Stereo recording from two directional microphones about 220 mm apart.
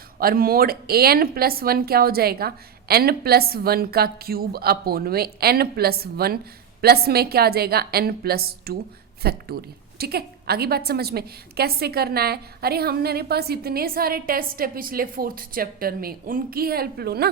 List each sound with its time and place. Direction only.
0.2 s a woman's voice: 40° right (ahead or behind)